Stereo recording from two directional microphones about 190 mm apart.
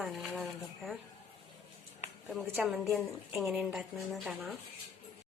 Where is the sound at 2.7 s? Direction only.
Centre (ahead or behind).